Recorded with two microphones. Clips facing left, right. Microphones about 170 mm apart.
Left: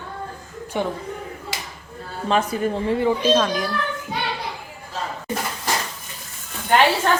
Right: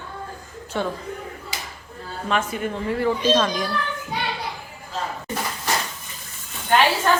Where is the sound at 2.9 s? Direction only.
20° left (ahead or behind).